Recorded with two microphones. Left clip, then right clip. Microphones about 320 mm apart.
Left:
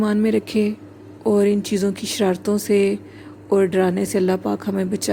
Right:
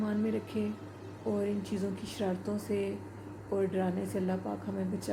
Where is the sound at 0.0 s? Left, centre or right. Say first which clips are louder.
Left 14 dB; left.